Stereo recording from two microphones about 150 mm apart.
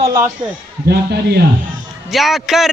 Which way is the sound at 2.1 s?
Centre (ahead or behind).